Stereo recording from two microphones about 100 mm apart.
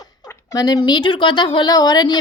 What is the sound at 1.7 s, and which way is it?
Speech, 40° left (ahead or behind).